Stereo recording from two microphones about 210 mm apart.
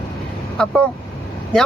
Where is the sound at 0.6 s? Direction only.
5° left (ahead or behind).